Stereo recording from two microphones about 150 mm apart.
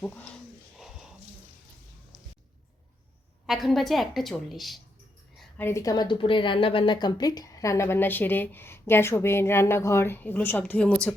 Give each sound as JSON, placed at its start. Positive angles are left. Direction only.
{"t": 0.0, "sound": "a woman's voice", "side_deg": 10}
{"t": 0.8, "sound": "a sound", "side_deg": -5}
{"t": 3.4, "sound": "a woman's voice", "side_deg": 0}
{"t": 5.5, "sound": "a woman's voice", "side_deg": 15}